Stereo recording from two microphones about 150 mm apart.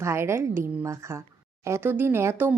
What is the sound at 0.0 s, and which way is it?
Speech, 20° right (ahead or behind).